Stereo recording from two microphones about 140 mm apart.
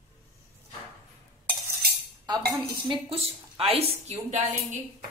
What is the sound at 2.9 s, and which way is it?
A woman's voice, 40° right (ahead or behind).